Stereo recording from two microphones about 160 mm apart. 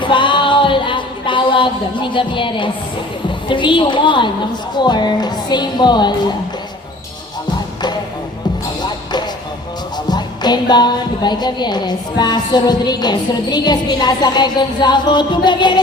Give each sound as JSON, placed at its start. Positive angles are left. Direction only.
{"t": 0.0, "sound": "a sound", "side_deg": 30}
{"t": 3.5, "sound": "a woman's voice", "side_deg": 30}
{"t": 4.8, "sound": "music", "side_deg": 25}
{"t": 10.1, "sound": "music", "side_deg": 25}